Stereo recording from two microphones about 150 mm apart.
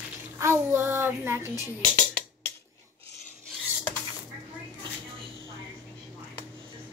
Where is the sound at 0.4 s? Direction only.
15° right (ahead or behind).